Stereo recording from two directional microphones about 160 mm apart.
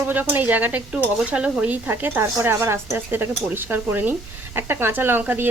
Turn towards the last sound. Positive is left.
turn(degrees=-10)  # may be behind; listen again after turning